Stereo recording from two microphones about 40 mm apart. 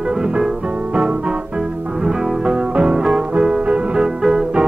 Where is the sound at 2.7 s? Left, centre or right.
Right.